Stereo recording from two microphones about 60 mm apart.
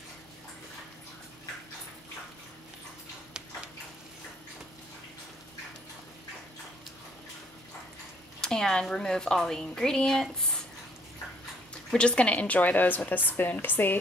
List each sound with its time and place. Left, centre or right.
8.4 s speech: centre
12.0 s a woman's voice: centre; by 13.9 s left